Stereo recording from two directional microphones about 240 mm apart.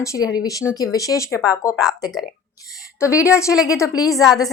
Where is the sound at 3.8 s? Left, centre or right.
Centre.